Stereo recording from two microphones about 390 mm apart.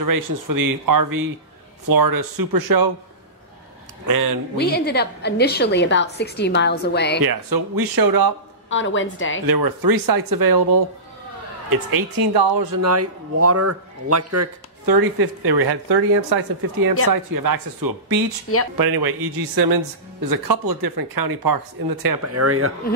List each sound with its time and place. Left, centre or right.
0.0 s speech: right
4.0 s speech: right
4.6 s a woman's voice: left
7.2 s speech: right
8.6 s a woman's voice: left
9.5 s speech: right
12.8 s speech: right
14.9 s speech: right
17.1 s speech: right
22.2 s speech: right